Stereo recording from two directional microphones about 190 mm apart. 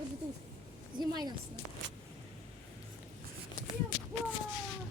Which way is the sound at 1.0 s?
20° right (ahead or behind).